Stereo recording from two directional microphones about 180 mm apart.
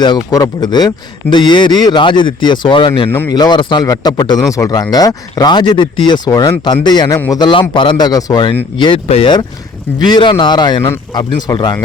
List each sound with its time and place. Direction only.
0.0 s speech: 25° left (ahead or behind)